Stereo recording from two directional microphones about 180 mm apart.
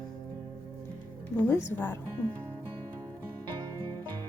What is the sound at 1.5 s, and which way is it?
Speech, 10° left (ahead or behind).